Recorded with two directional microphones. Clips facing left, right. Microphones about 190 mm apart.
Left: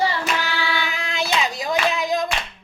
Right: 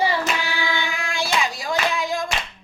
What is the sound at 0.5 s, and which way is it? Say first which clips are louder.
Singing: left 1 dB; 15° right (ahead or behind).